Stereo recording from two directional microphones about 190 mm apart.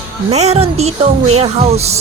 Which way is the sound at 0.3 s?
35° right (ahead or behind).